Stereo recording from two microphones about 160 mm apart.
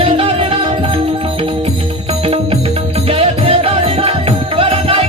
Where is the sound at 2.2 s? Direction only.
35° right (ahead or behind).